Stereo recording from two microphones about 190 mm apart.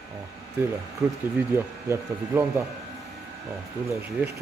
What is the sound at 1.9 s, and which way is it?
Speech, 15° right (ahead or behind).